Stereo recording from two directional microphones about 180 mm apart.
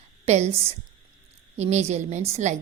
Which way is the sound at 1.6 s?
40° right (ahead or behind).